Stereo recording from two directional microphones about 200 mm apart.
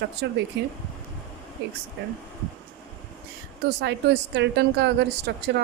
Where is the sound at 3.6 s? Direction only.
60° right (ahead or behind).